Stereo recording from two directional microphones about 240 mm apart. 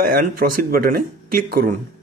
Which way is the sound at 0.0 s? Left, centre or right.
Right.